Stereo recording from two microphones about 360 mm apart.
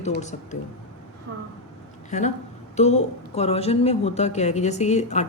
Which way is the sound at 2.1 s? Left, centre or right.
Centre.